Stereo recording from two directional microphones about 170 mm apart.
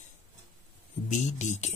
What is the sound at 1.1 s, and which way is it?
Speech, 45° left (ahead or behind).